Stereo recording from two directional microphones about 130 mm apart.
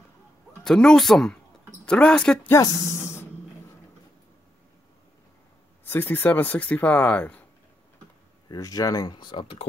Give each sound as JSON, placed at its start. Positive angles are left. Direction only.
{"t": 0.7, "sound": "speech", "side_deg": 5}
{"t": 2.5, "sound": "speech", "side_deg": 25}
{"t": 5.9, "sound": "speech", "side_deg": 15}
{"t": 8.5, "sound": "speech", "side_deg": 30}